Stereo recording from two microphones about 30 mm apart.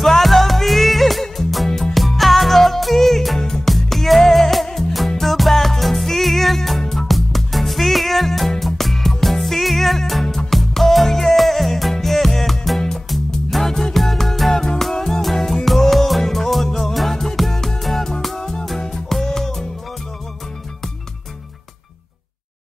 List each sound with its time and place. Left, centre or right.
0.0 s music: centre
4.6 s music: centre
5.2 s music: centre
18.4 s music: left